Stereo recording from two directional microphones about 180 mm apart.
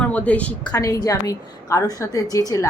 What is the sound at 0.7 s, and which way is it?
A woman's voice, 20° left (ahead or behind).